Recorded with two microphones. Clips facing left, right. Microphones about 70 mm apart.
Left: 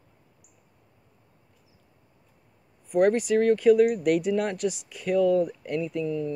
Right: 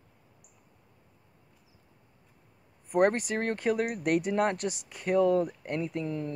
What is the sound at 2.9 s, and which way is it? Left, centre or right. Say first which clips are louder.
Speech: left 4 dB; right.